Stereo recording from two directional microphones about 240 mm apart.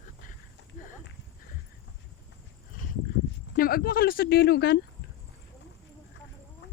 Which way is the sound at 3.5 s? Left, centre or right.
Left.